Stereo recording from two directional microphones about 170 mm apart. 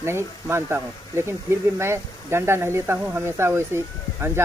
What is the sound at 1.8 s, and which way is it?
Speech, 15° right (ahead or behind).